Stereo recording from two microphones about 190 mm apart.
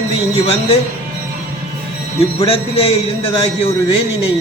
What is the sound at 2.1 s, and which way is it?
A man's voice, 30° left (ahead or behind).